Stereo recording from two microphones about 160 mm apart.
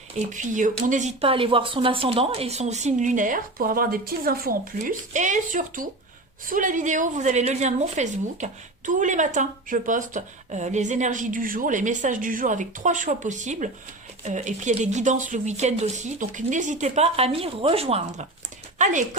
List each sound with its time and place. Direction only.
0.3 s speech: 55° right (ahead or behind)
1.2 s speech: 35° right (ahead or behind)
18.8 s speech: 50° right (ahead or behind)